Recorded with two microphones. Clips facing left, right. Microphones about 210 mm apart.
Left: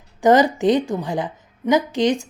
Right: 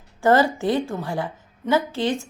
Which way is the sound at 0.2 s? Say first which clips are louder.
Left 3 dB; 15° left (ahead or behind).